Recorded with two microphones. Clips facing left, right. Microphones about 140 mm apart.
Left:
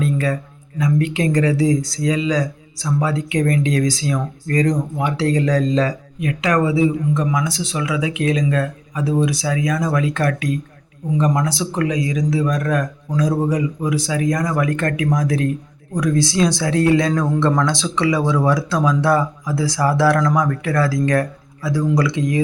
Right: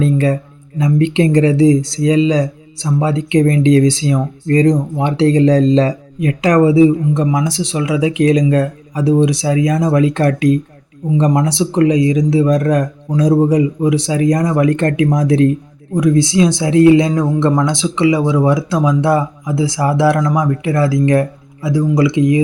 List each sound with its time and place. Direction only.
0.0 s speech: 30° right (ahead or behind)